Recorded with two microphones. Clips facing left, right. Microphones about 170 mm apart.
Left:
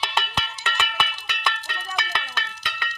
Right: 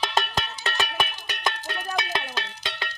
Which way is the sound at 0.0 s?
40° right (ahead or behind).